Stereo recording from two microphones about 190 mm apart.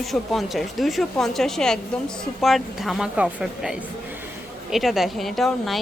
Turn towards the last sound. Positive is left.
turn(degrees=0)  # may be behind; listen again after turning